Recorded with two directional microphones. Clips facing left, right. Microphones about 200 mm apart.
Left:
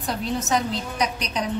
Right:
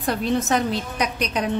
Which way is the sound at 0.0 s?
55° right (ahead or behind).